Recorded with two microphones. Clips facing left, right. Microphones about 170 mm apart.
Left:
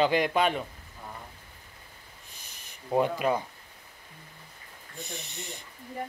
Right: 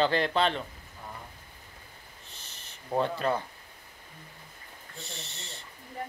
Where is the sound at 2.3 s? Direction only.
10° left (ahead or behind).